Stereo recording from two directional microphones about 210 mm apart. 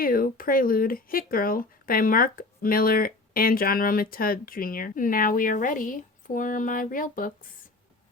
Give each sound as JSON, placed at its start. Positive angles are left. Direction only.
{"t": 0.0, "sound": "speech", "side_deg": 45}